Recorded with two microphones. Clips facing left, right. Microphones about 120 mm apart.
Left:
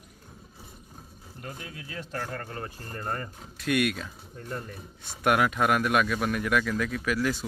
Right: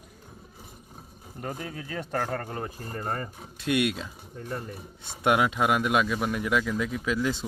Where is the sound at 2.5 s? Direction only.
15° right (ahead or behind).